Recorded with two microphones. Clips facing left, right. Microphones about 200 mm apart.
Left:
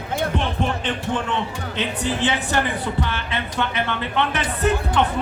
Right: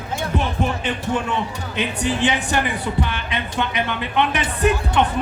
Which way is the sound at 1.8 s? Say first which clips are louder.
Right 2 dB; 15° right (ahead or behind).